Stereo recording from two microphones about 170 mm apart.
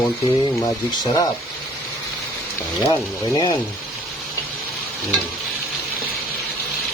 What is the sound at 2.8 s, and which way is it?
Speech, 25° left (ahead or behind).